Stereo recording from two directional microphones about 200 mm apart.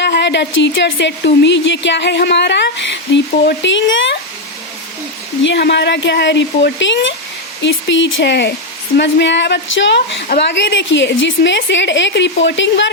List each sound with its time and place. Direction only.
0.0 s speech: 60° left (ahead or behind)
5.4 s speech: 60° left (ahead or behind)